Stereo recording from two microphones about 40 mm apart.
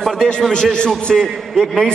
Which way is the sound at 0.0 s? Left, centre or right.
Centre.